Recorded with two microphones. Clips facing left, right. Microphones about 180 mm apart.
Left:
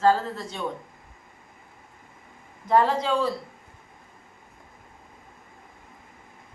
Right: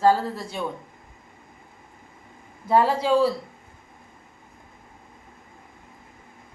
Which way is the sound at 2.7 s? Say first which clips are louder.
Right 2 dB; 10° right (ahead or behind).